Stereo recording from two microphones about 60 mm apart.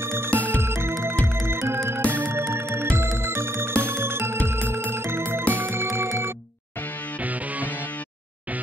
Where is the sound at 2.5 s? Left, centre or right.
Right.